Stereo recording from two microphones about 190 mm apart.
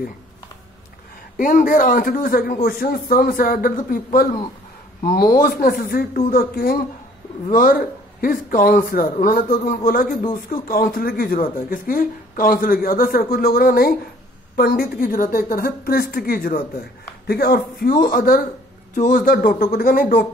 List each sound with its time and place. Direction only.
1.4 s a man's voice: 45° left (ahead or behind)